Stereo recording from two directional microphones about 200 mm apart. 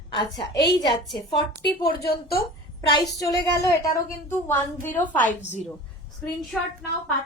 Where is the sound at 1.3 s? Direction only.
20° left (ahead or behind).